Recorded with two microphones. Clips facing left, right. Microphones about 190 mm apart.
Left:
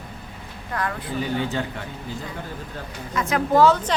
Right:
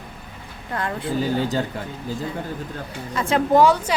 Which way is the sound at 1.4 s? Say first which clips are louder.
Right 3 dB; 35° right (ahead or behind).